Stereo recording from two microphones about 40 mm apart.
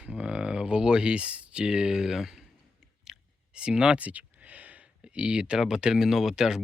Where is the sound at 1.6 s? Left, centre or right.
Centre.